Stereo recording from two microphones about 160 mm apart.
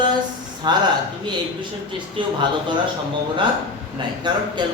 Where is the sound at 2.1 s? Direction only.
30° right (ahead or behind).